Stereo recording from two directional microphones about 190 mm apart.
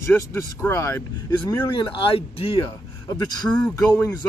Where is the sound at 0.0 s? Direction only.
10° left (ahead or behind); by 2.6 s 30° left (ahead or behind).